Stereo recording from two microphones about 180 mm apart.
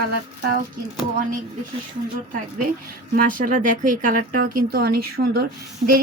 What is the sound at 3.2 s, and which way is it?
Speech, 50° right (ahead or behind).